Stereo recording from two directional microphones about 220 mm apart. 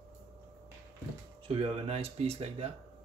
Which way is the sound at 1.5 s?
25° right (ahead or behind).